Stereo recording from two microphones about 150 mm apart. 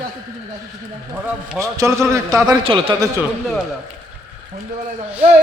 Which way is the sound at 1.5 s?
20° right (ahead or behind).